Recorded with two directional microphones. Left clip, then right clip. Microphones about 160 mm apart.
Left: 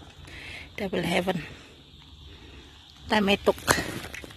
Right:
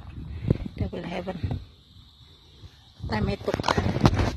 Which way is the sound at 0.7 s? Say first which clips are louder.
Left 7 dB; 15° left (ahead or behind).